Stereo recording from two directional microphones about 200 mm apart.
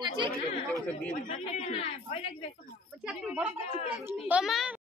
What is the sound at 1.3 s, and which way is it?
Speech, 35° left (ahead or behind).